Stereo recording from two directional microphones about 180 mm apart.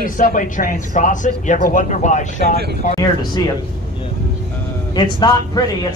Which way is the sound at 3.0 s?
20° left (ahead or behind).